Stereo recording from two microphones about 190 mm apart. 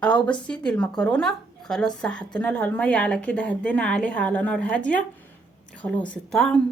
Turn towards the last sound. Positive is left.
turn(degrees=5)  # may be behind; listen again after turning